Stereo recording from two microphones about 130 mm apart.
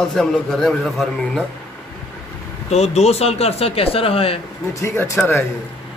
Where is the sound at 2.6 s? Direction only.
55° left (ahead or behind).